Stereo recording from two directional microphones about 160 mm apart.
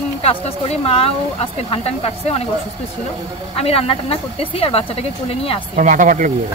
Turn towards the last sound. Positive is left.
turn(degrees=-55)  # may be behind; listen again after turning